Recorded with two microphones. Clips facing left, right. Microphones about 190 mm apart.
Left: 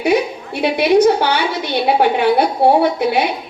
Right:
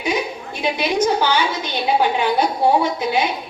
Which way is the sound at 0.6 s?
65° left (ahead or behind).